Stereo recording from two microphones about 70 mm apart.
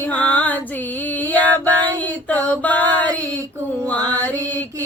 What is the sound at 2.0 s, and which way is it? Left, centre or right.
Female singing, left.